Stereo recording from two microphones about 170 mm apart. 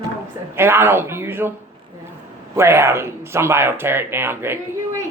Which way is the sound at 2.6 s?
15° right (ahead or behind).